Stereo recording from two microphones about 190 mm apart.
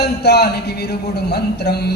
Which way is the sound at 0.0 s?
60° left (ahead or behind).